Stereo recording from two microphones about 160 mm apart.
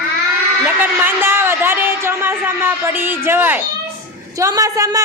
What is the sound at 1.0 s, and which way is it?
A woman's voice, 15° right (ahead or behind).